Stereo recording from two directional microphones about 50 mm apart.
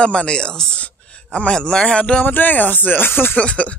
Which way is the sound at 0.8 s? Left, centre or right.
Left.